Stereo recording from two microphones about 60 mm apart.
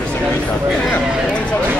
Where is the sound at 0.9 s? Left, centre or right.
Centre.